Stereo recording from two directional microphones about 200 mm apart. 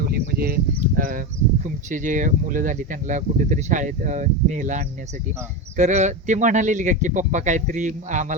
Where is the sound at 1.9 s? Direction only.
40° right (ahead or behind).